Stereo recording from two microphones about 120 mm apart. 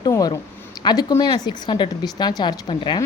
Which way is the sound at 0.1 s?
30° left (ahead or behind).